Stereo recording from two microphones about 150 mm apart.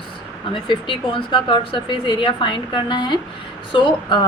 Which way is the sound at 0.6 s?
35° left (ahead or behind).